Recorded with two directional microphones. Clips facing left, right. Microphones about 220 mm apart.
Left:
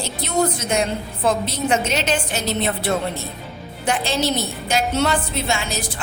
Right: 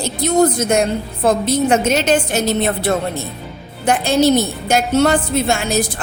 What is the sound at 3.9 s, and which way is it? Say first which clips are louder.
A woman's voice: right 8 dB; 45° right (ahead or behind).